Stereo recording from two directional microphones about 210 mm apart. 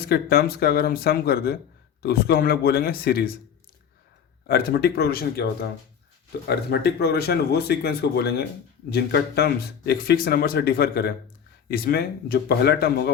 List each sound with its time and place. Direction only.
0.1 s speech: 45° left (ahead or behind)
4.4 s speech: 45° left (ahead or behind)
6.5 s speech: 50° left (ahead or behind)